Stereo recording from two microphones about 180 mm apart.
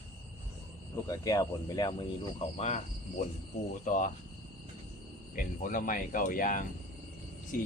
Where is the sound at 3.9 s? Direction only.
45° left (ahead or behind).